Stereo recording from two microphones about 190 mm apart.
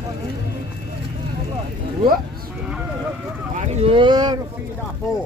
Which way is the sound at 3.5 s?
35° right (ahead or behind).